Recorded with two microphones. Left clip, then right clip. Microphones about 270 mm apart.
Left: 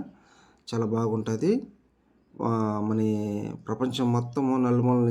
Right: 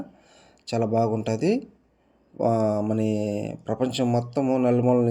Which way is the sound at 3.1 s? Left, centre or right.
Left.